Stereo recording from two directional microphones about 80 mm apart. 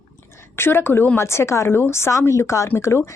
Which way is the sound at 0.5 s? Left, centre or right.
Left.